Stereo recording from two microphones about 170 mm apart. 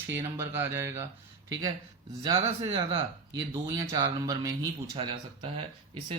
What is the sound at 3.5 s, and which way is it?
Speech, 20° right (ahead or behind).